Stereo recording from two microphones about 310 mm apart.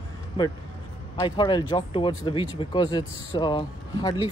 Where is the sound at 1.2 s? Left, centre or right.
Centre.